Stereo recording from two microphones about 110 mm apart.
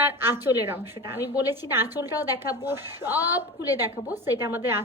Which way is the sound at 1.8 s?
35° left (ahead or behind).